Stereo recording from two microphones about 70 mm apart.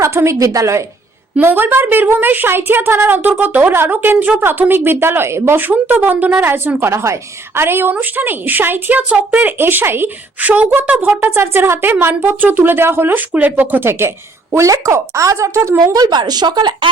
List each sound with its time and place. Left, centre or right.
0.0 s a woman's voice: right
1.4 s a woman's voice: right
10.5 s a woman's voice: centre
11.1 s speech: right
14.5 s a woman's voice: right
15.9 s speech: right